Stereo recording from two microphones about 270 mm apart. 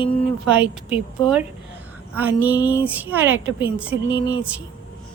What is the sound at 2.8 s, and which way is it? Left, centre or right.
A woman's voice, centre.